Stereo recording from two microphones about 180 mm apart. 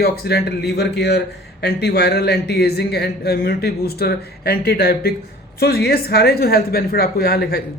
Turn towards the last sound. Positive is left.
turn(degrees=60)  # may be behind; listen again after turning